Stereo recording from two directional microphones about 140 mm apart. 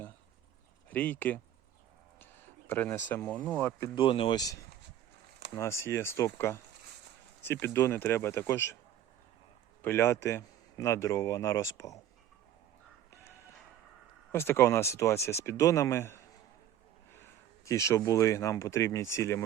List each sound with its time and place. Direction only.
0.9 s speech: 10° left (ahead or behind)
3.9 s speech: 40° left (ahead or behind)
5.5 s speech: 20° left (ahead or behind)
9.8 s speech: 15° left (ahead or behind)
14.3 s speech: 15° left (ahead or behind)
17.7 s speech: 20° left (ahead or behind)